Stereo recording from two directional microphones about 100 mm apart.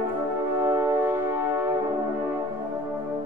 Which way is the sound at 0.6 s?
20° right (ahead or behind).